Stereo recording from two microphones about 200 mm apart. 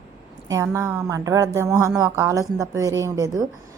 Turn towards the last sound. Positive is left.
turn(degrees=-15)  # may be behind; listen again after turning